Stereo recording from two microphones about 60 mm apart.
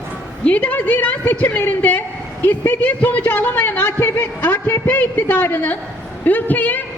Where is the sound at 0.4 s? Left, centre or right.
Left.